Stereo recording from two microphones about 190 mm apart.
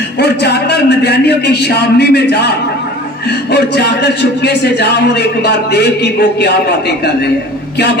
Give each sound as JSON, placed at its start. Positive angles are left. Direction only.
{"t": 0.2, "sound": "a man's voice", "side_deg": 60}